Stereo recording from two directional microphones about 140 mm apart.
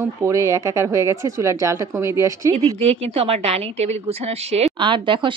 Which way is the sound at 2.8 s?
45° right (ahead or behind).